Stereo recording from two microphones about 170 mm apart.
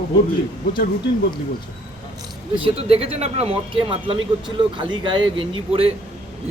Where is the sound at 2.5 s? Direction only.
35° right (ahead or behind).